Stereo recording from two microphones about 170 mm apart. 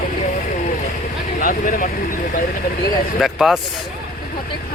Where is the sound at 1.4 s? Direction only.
55° left (ahead or behind).